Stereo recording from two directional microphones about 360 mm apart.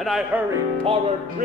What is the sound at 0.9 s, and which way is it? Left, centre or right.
Music, centre.